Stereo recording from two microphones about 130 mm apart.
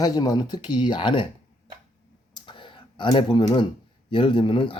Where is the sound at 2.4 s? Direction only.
40° left (ahead or behind).